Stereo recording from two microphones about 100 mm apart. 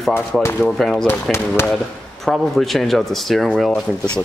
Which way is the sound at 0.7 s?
5° left (ahead or behind).